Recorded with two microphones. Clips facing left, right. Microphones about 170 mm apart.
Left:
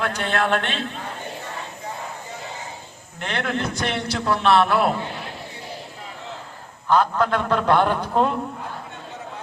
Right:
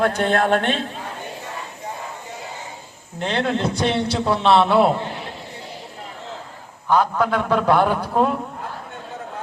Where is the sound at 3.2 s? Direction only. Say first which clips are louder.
Right 4 dB; 25° right (ahead or behind).